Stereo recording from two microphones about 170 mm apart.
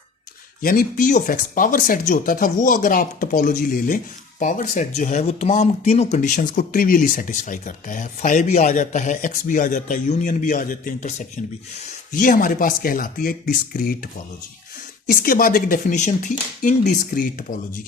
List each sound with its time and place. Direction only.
0.6 s speech: 55° left (ahead or behind)
15.1 s speech: 60° left (ahead or behind)